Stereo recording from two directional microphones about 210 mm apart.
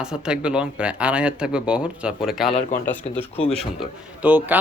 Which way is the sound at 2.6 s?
35° left (ahead or behind).